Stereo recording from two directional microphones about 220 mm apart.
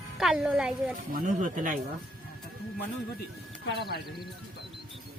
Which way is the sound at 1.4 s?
40° right (ahead or behind).